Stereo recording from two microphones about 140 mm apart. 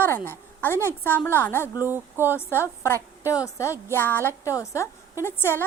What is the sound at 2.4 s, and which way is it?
A woman's voice, 15° left (ahead or behind).